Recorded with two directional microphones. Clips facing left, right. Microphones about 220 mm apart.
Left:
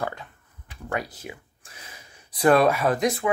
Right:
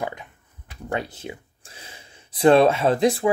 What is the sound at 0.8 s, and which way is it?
Speech, 25° right (ahead or behind).